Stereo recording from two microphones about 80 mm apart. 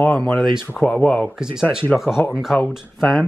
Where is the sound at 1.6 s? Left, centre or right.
Centre.